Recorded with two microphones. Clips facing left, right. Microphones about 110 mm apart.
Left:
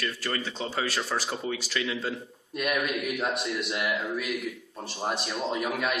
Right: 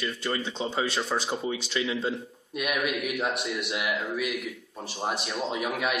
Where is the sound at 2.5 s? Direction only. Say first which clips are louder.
Even; 5° right (ahead or behind).